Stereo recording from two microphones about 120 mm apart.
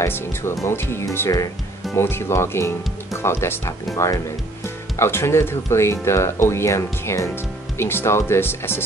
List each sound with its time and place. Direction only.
0.0 s speech: 20° left (ahead or behind)